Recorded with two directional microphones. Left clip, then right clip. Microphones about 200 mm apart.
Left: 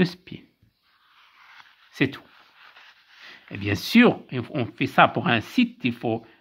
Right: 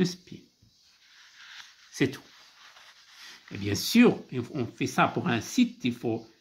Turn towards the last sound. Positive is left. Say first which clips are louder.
# left 4 dB
turn(degrees=45)  # may be behind; listen again after turning